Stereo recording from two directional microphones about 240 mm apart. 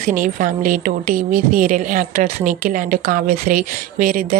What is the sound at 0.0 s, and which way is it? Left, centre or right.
Speech, right.